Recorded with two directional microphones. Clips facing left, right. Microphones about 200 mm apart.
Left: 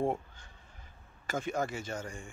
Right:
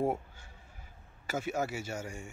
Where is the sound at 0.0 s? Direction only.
5° right (ahead or behind).